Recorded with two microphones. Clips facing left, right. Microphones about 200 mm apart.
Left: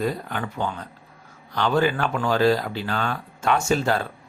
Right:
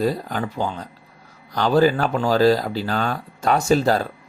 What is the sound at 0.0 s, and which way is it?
Speech, 35° right (ahead or behind).